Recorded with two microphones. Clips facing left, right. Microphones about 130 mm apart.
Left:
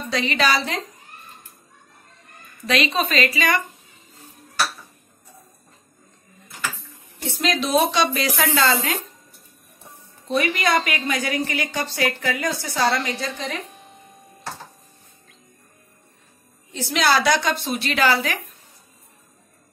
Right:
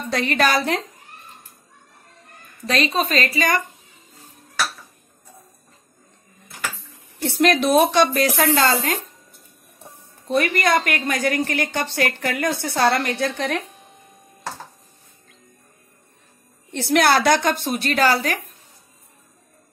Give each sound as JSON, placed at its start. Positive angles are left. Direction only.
{"t": 0.1, "sound": "a woman's voice", "side_deg": -50}
{"t": 2.6, "sound": "a woman's voice", "side_deg": -40}
{"t": 7.2, "sound": "a woman's voice", "side_deg": -65}
{"t": 7.9, "sound": "a woman's voice", "side_deg": -50}
{"t": 10.3, "sound": "a woman's voice", "side_deg": -50}
{"t": 16.7, "sound": "a woman's voice", "side_deg": -60}